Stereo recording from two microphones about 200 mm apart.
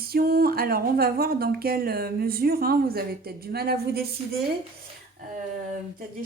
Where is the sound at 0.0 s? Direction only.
50° right (ahead or behind).